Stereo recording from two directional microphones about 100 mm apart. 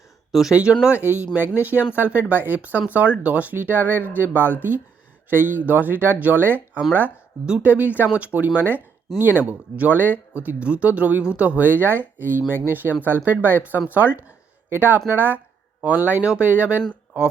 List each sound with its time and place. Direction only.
0.3 s speech: centre (ahead or behind)